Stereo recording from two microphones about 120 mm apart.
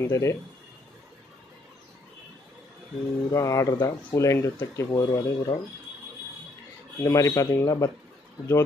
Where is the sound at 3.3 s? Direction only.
25° left (ahead or behind).